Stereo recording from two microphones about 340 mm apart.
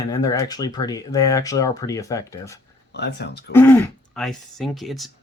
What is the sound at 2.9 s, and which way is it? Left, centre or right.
Speech, left.